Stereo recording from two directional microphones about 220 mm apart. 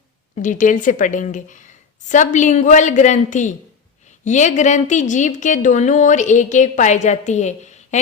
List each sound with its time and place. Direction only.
0.3 s a woman's voice: 35° left (ahead or behind)